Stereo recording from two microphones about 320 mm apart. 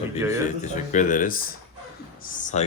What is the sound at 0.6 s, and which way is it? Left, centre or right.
Speech, left.